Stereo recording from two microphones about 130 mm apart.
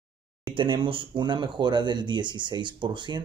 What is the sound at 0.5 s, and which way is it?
Speech, 40° right (ahead or behind).